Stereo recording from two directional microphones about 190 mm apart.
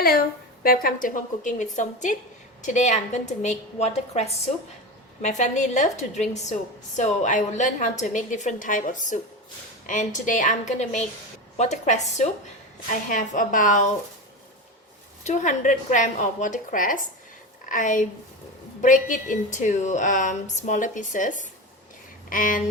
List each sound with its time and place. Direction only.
0.0 s a woman's voice: 50° left (ahead or behind)
15.2 s a woman's voice: 40° left (ahead or behind)